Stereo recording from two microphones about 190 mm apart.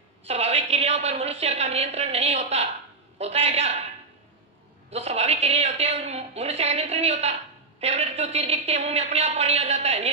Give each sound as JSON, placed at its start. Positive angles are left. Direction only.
{"t": 0.3, "sound": "a woman's voice", "side_deg": -35}
{"t": 4.8, "sound": "a woman's voice", "side_deg": -35}